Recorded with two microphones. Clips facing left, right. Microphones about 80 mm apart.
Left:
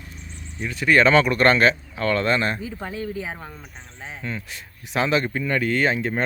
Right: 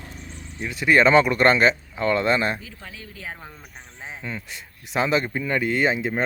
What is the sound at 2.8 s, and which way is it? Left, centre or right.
Speech, left.